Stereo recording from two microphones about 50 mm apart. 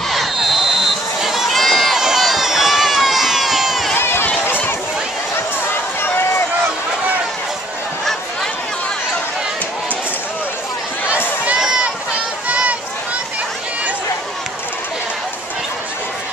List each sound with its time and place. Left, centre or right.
0.1 s crowd: centre
2.0 s run: centre
4.0 s run: left
4.5 s a sound: left
6.0 s run: left
12.4 s a sound: right